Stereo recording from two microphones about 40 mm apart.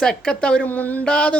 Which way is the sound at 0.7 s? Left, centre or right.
Left.